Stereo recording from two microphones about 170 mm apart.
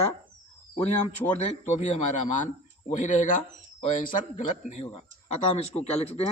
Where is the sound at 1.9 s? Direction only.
45° left (ahead or behind).